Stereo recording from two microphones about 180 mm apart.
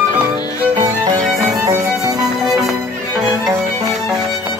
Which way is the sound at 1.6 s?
20° right (ahead or behind).